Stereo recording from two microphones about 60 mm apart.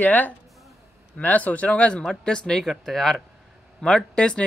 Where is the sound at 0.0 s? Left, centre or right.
Left; by 2.6 s centre.